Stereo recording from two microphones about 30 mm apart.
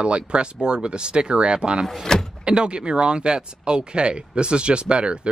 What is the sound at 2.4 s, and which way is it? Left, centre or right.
Speech, right.